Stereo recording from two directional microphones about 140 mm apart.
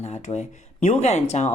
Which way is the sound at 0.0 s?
50° left (ahead or behind).